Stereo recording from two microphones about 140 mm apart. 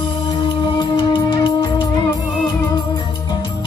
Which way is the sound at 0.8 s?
35° left (ahead or behind).